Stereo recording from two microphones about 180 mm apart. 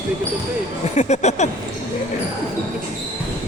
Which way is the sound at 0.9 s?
40° left (ahead or behind).